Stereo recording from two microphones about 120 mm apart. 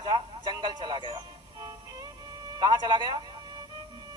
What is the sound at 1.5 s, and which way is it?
Music, 30° right (ahead or behind).